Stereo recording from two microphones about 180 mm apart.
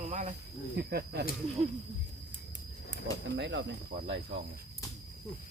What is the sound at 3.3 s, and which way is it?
Speech, 85° right.